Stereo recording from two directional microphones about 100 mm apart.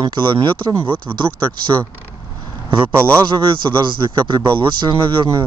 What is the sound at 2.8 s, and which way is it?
Speech, 20° right (ahead or behind).